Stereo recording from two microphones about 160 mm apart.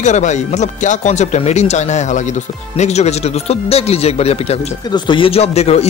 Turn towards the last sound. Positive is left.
turn(degrees=40)  # may be behind; listen again after turning